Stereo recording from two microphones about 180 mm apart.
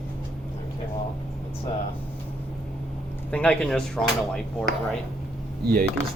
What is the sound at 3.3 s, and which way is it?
Speech, 5° left (ahead or behind).